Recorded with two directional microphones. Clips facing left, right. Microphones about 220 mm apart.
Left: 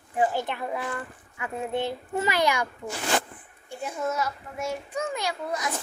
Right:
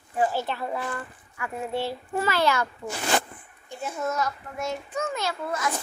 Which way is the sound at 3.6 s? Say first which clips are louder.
Even; 10° left (ahead or behind).